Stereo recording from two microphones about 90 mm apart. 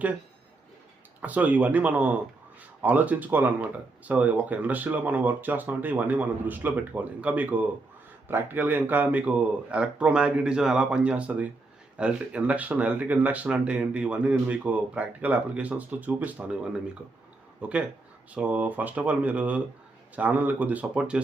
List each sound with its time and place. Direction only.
1.2 s speech: 15° right (ahead or behind)